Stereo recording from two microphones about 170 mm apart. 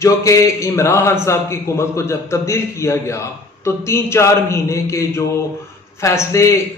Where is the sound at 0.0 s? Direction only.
20° left (ahead or behind).